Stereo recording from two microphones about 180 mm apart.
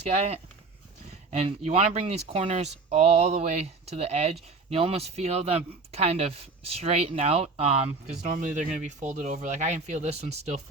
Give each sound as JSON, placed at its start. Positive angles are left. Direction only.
{"t": 0.1, "sound": "speech", "side_deg": -35}